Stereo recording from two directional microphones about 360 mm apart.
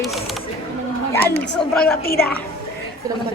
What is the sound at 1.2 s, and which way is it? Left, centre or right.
Speech, left.